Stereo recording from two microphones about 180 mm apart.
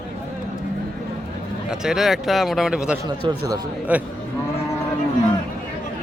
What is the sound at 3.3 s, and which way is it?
Speech, 20° right (ahead or behind).